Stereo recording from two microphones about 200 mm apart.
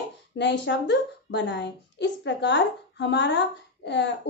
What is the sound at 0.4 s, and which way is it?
A woman's voice, 60° left (ahead or behind).